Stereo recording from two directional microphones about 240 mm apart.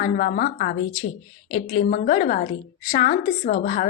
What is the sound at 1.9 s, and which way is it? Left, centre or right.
Speech, left.